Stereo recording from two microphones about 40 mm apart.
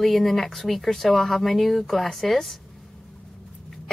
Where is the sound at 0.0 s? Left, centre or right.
Centre.